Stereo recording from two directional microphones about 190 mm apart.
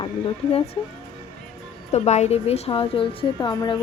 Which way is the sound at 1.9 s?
35° left (ahead or behind).